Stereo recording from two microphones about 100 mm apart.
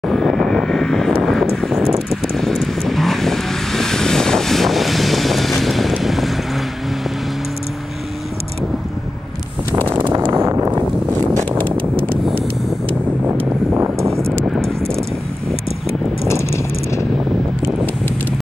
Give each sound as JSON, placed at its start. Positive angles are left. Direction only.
{"t": 0.1, "sound": "vehicle", "side_deg": 5}
{"t": 9.8, "sound": "a sound", "side_deg": -20}
{"t": 10.3, "sound": "vehicle", "side_deg": -25}
{"t": 13.7, "sound": "vehicle", "side_deg": -25}
{"t": 16.3, "sound": "vehicle", "side_deg": 30}